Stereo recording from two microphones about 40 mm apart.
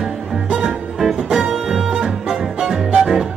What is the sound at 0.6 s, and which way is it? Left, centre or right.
Music, centre.